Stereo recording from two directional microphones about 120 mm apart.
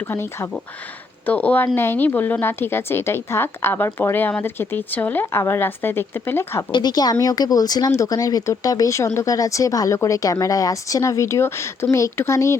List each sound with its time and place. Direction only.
1.3 s speech: 10° left (ahead or behind)
6.7 s speech: 35° left (ahead or behind)